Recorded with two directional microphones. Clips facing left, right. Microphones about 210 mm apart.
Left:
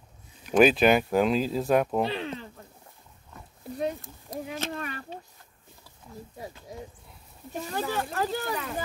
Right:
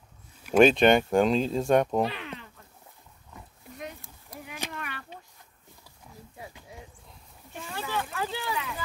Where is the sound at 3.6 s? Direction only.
35° left (ahead or behind).